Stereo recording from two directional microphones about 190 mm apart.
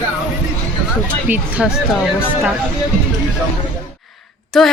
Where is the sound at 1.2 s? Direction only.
10° right (ahead or behind).